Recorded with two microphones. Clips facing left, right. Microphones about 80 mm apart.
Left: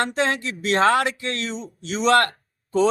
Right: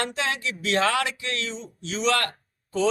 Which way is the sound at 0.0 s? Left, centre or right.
Left.